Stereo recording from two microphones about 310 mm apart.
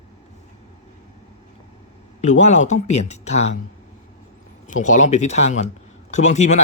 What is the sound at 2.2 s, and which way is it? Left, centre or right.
A man's voice, left.